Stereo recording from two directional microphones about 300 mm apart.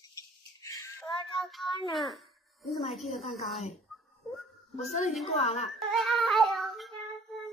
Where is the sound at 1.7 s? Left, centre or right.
Centre.